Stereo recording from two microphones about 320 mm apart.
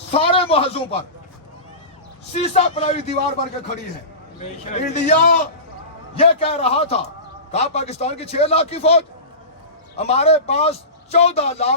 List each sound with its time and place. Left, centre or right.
0.1 s a man's voice: centre
2.3 s a man's voice: centre
4.4 s a man's voice: left